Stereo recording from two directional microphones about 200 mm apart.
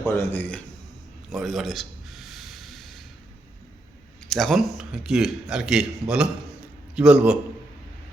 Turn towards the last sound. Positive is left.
turn(degrees=-5)  # may be behind; listen again after turning